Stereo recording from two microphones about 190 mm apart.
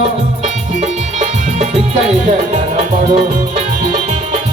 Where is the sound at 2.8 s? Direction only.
35° right (ahead or behind).